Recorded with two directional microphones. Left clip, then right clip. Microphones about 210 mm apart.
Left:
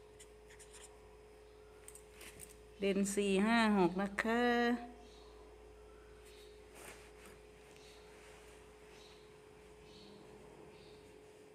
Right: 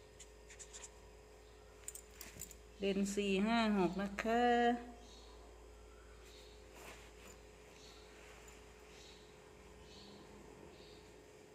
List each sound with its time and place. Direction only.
2.8 s speech: 35° left (ahead or behind)